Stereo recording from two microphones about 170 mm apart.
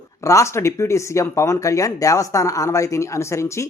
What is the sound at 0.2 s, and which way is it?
Speech, 15° left (ahead or behind).